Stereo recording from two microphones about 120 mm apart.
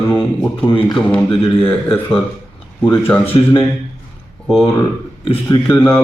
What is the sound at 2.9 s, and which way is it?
Speech, 20° left (ahead or behind).